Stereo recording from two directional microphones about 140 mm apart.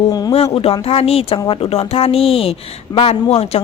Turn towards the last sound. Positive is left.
turn(degrees=50)  # may be behind; listen again after turning